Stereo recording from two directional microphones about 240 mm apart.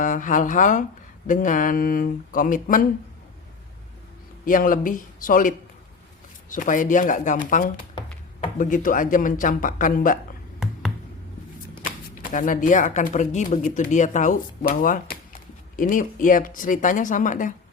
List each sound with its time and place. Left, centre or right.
0.0 s speech: left
4.4 s speech: left
11.8 s speech: left